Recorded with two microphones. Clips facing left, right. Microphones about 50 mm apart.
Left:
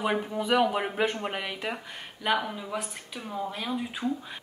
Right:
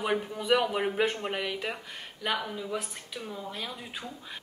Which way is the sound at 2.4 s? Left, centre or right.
Centre.